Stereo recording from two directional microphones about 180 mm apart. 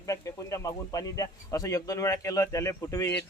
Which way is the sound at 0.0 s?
15° left (ahead or behind).